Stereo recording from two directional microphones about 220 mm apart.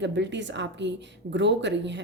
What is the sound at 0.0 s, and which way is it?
Speech, 55° right (ahead or behind).